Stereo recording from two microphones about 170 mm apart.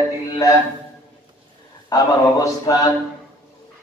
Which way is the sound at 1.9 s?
20° left (ahead or behind).